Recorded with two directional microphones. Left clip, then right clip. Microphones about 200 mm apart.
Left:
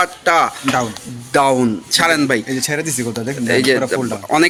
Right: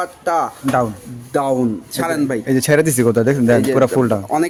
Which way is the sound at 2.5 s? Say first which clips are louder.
Right 6 dB; 50° right (ahead or behind).